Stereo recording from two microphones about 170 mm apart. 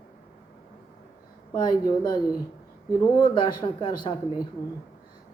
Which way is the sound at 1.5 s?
25° left (ahead or behind).